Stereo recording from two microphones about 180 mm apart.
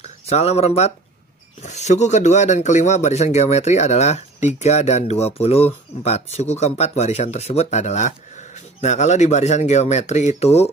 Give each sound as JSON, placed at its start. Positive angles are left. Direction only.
{"t": 0.0, "sound": "speech", "side_deg": 35}